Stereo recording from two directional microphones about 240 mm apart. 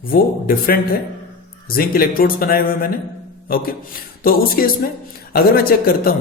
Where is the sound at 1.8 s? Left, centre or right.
Left.